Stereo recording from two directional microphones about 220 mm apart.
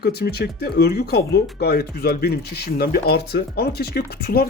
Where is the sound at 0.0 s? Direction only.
45° left (ahead or behind).